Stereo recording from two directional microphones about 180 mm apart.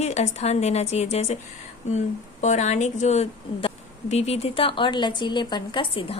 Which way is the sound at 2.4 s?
40° left (ahead or behind).